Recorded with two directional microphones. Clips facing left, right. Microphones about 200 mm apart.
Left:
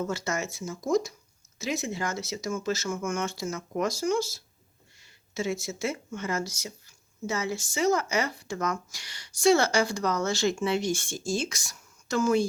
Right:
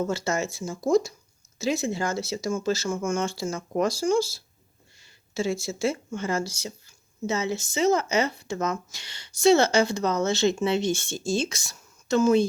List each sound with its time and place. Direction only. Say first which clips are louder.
0.0 s speech: right 4 dB; 30° right (ahead or behind)